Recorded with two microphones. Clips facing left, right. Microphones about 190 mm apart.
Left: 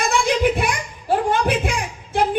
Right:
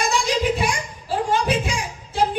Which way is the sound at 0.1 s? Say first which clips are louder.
Left 3 dB; 55° left (ahead or behind).